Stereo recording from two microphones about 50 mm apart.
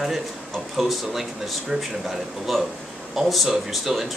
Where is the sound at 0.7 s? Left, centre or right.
Centre.